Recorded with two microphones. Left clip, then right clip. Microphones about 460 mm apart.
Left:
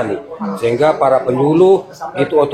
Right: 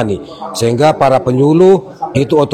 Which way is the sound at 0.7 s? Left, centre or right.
Right.